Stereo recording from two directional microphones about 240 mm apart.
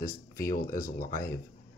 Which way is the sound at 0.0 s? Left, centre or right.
Left.